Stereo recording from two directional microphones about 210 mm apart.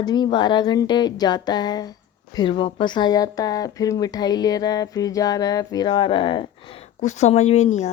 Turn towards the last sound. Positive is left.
turn(degrees=35)  # may be behind; listen again after turning